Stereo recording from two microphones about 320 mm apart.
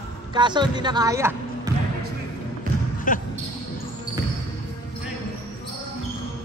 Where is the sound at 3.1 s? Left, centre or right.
Left.